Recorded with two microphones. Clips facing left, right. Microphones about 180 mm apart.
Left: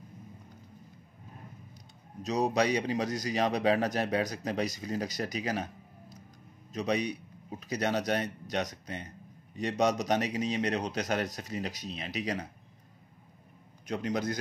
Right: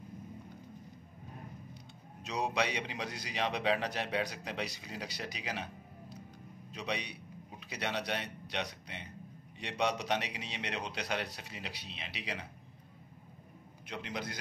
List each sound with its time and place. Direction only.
2.2 s a man's voice: 40° left (ahead or behind)
6.7 s a man's voice: 40° left (ahead or behind)
13.8 s a man's voice: 45° left (ahead or behind)